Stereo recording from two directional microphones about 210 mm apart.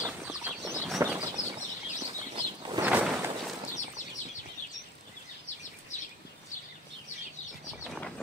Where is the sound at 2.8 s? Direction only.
10° right (ahead or behind).